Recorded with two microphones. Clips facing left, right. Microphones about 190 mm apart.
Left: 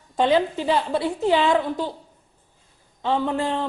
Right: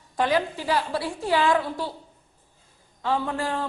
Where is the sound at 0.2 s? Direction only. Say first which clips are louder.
Left 4 dB; 25° left (ahead or behind).